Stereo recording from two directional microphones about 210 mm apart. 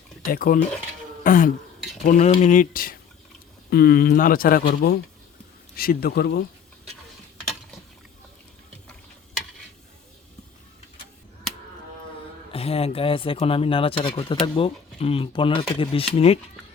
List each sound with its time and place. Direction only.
0.3 s speech: 40° left (ahead or behind)
1.2 s throat clearing: 40° left (ahead or behind)
2.0 s speech: 35° left (ahead or behind)
12.5 s speech: 30° left (ahead or behind)